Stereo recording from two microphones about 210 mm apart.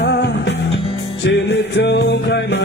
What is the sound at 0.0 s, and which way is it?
Music, 55° left (ahead or behind).